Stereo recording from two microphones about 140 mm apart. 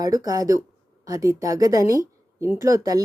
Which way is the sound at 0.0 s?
25° right (ahead or behind).